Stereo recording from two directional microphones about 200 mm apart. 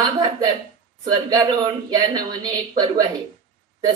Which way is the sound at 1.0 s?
20° right (ahead or behind).